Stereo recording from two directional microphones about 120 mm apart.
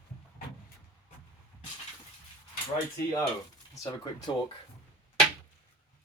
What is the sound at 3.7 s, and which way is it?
Speech, 35° left (ahead or behind).